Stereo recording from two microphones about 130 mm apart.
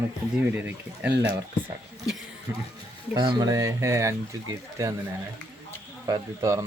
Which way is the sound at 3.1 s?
35° right (ahead or behind).